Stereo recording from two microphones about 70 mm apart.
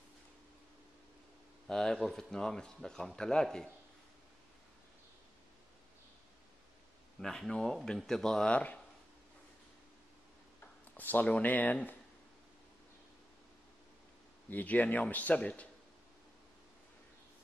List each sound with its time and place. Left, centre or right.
1.7 s speech: centre
7.2 s speech: centre
11.0 s speech: left
14.5 s speech: left